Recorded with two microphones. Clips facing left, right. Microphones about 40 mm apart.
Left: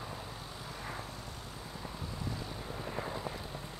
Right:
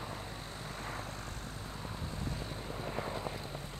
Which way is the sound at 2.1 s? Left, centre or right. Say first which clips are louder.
Left 1 dB; right.